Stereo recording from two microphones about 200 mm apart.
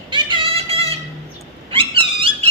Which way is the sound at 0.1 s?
25° right (ahead or behind).